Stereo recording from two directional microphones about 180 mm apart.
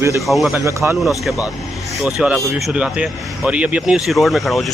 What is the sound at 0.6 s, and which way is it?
Speech, 15° right (ahead or behind).